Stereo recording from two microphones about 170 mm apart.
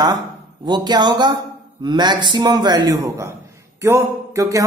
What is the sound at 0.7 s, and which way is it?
A man's voice, 25° right (ahead or behind).